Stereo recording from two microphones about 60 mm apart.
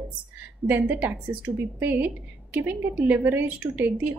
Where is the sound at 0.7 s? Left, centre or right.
Right.